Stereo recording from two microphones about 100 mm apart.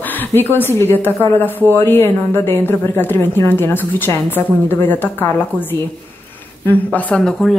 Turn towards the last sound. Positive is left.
turn(degrees=5)  # may be behind; listen again after turning